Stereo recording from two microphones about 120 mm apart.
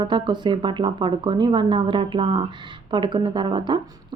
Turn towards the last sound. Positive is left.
turn(degrees=-40)  # may be behind; listen again after turning